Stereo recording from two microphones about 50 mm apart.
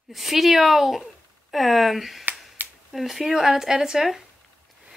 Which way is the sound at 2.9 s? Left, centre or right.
Centre.